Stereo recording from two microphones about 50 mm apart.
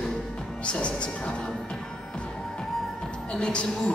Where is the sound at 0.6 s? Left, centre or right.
Left.